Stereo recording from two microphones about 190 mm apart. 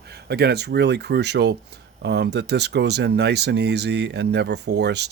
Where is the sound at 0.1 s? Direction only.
60° right (ahead or behind).